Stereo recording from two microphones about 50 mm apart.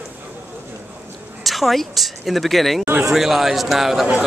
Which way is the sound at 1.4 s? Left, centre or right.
Centre.